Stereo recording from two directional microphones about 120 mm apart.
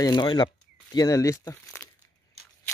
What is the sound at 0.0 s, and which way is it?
Speech, 40° left (ahead or behind).